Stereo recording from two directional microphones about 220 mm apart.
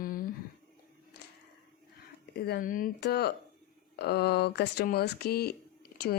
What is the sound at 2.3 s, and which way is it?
A woman's voice, 45° left (ahead or behind).